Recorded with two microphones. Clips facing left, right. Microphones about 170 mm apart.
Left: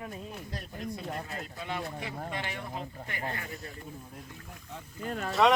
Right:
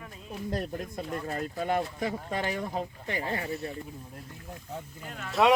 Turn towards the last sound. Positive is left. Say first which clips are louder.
# left 7 dB
turn(degrees=40)  # may be behind; listen again after turning